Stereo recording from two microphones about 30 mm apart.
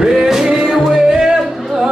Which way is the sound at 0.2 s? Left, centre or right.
Centre.